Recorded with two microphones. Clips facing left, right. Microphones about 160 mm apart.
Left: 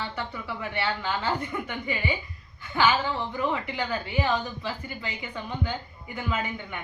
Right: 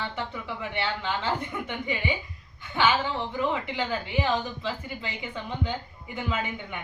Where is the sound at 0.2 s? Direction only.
20° right (ahead or behind).